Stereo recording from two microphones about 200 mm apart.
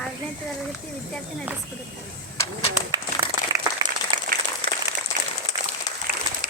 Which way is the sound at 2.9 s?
20° right (ahead or behind).